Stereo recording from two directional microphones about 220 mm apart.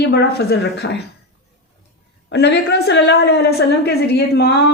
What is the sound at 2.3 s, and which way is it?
Speech, 50° left (ahead or behind).